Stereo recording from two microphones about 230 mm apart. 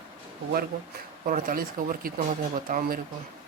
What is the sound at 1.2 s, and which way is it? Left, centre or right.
Speech, right.